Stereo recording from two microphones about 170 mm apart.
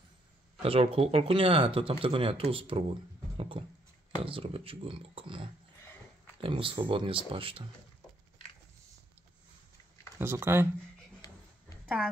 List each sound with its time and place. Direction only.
0.6 s speech: 35° right (ahead or behind)
10.1 s speech: 15° right (ahead or behind)